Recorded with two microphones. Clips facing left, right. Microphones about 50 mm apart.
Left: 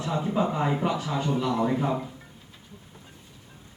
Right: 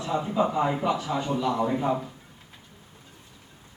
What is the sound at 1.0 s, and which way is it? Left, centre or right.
Speech, right.